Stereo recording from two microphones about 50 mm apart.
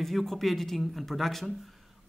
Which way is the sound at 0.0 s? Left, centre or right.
Centre.